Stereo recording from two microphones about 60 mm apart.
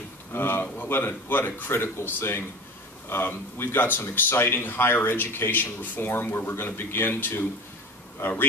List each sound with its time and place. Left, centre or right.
0.3 s speech: left